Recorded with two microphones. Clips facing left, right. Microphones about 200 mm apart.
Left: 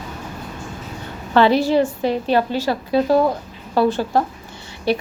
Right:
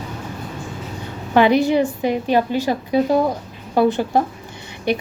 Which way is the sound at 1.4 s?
15° right (ahead or behind).